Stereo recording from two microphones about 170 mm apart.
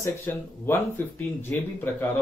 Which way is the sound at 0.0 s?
15° left (ahead or behind).